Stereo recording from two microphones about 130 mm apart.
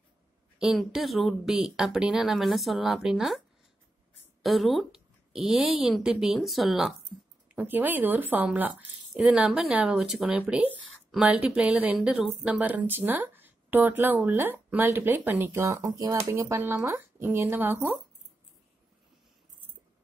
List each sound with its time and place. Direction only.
0.6 s speech: 5° right (ahead or behind)
7.4 s speech: 10° right (ahead or behind)